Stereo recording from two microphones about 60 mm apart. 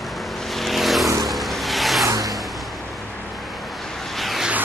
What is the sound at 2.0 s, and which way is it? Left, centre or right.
Vehicle, right.